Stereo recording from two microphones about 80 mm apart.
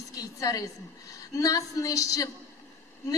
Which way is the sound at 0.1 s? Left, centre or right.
Left.